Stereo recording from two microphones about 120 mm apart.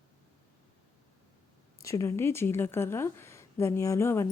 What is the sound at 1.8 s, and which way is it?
A woman's voice, 25° left (ahead or behind).